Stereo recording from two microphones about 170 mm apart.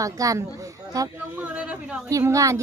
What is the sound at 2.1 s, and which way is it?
Speech, 20° right (ahead or behind).